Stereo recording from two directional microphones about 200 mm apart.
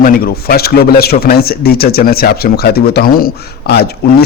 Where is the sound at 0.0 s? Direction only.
50° left (ahead or behind).